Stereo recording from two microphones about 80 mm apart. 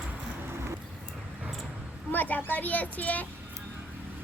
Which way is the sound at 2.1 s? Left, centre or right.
Left.